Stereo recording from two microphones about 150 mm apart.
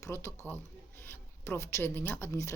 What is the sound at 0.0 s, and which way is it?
A woman's voice, 20° left (ahead or behind).